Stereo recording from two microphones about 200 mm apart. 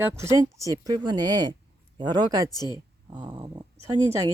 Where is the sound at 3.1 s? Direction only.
20° right (ahead or behind).